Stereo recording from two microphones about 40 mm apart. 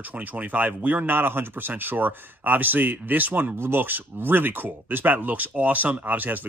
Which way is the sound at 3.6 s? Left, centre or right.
Right.